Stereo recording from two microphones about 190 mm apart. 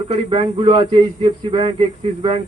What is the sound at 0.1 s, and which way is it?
A man's voice, 30° right (ahead or behind).